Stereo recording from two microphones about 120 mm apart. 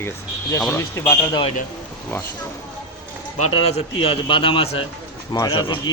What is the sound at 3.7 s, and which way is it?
A man's voice, 50° left (ahead or behind).